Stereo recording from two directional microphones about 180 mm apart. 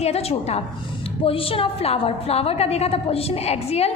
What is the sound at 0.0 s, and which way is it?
A woman's voice, 35° left (ahead or behind).